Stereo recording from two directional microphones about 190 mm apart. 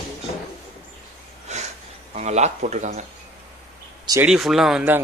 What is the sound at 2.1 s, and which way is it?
Speech, 35° right (ahead or behind).